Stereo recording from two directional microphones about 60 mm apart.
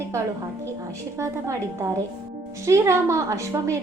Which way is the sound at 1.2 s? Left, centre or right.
Right.